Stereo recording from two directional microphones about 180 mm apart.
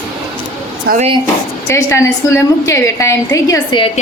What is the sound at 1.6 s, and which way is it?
A woman's voice, 15° left (ahead or behind).